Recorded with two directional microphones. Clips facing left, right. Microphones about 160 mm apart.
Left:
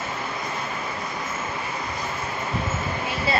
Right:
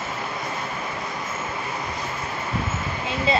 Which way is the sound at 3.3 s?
20° right (ahead or behind).